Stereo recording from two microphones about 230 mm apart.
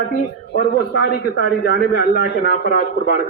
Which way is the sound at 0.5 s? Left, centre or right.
Left.